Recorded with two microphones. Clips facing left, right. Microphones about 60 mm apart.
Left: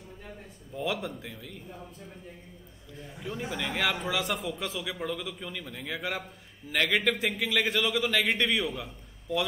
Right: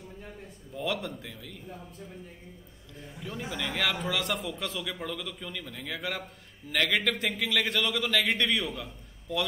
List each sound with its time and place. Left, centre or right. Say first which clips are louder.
0.7 s a man's voice: even; centre
3.0 s a man's voice: left 2 dB; centre